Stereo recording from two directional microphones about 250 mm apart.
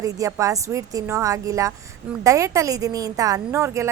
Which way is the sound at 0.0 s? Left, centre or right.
Centre.